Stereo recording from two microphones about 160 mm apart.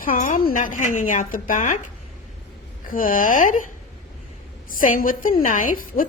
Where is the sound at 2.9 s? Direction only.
60° left (ahead or behind).